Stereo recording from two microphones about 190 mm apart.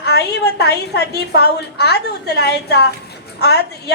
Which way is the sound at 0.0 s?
60° left (ahead or behind).